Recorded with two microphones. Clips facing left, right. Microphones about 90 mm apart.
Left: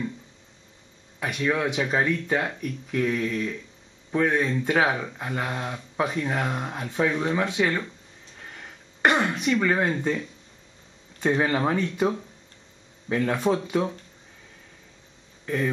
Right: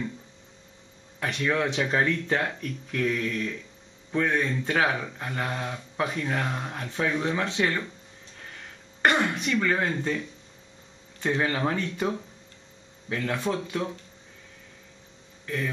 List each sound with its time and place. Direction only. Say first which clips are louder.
1.2 s speech: left 1 dB; 10° left (ahead or behind)
9.0 s speech: left 2 dB; 20° left (ahead or behind)
15.4 s speech: left 5 dB; 20° left (ahead or behind)